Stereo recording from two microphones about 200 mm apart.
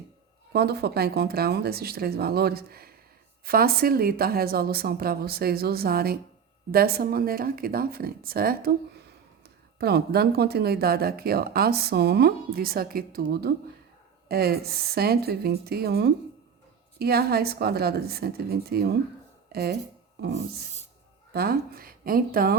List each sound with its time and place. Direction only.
0.5 s speech: 55° right (ahead or behind)
9.8 s speech: 50° right (ahead or behind)
21.3 s speech: 50° right (ahead or behind)